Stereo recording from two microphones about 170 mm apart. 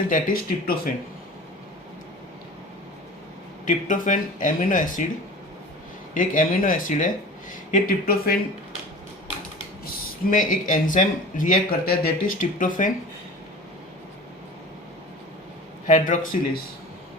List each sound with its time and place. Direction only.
0.1 s speech: 55° left (ahead or behind)
3.7 s speech: 50° left (ahead or behind)
6.1 s speech: 55° left (ahead or behind)
9.8 s speech: 55° left (ahead or behind)
15.9 s speech: 45° left (ahead or behind)